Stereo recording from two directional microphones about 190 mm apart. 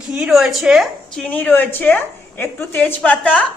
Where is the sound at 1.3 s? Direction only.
10° left (ahead or behind).